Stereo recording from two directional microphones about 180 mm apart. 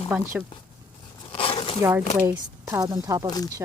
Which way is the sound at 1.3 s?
30° left (ahead or behind).